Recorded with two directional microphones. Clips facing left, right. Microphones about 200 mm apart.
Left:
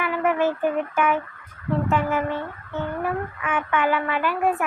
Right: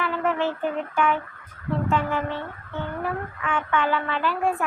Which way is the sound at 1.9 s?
20° left (ahead or behind).